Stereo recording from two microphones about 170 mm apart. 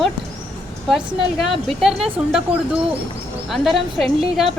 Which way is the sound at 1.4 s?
Centre (ahead or behind).